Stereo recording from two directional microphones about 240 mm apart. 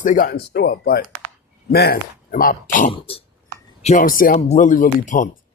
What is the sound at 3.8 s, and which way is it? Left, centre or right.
Speech, left.